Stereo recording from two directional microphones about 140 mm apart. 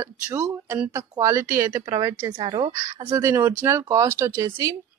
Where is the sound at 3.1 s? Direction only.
20° right (ahead or behind).